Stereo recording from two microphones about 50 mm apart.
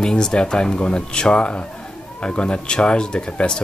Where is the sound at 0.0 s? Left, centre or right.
Centre.